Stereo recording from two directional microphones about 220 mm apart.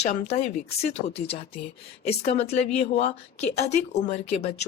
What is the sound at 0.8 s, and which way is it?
Speech, 30° left (ahead or behind).